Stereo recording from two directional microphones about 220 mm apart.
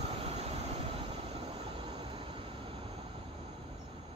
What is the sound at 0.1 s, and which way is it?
Vehicle, 25° right (ahead or behind).